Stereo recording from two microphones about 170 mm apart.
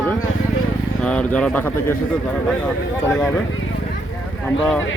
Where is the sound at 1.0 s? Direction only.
5° left (ahead or behind).